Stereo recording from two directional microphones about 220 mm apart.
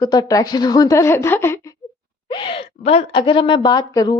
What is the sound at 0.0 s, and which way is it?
A woman's voice, 20° left (ahead or behind).